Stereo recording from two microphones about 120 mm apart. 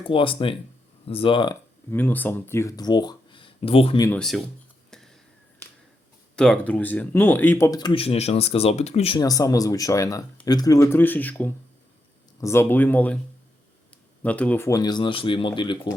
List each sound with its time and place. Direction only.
0.0 s speech: 45° left (ahead or behind)
1.9 s speech: 15° left (ahead or behind); by 3.9 s 50° left (ahead or behind)
4.1 s speech: 5° left (ahead or behind)
6.3 s speech: 5° left (ahead or behind)
7.7 s speech: 35° left (ahead or behind)
7.9 s speech: 55° left (ahead or behind)
9.1 s speech: 30° left (ahead or behind); by 13.1 s 15° left (ahead or behind)
14.2 s speech: 10° left (ahead or behind)
14.7 s speech: 35° left (ahead or behind)